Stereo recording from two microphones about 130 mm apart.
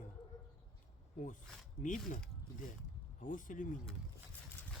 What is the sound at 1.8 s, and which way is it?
Speech, 85° left.